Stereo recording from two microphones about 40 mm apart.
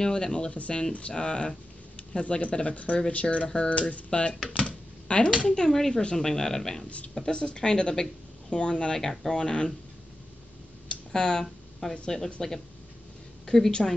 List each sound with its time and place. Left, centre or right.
0.0 s speech: left
4.6 s a sound: left
5.4 s speech: centre
7.2 s speech: left
10.9 s a sound: centre
11.8 s speech: centre
13.8 s speech: centre